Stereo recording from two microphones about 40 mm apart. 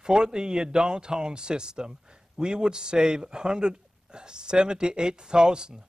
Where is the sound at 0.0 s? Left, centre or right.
Centre.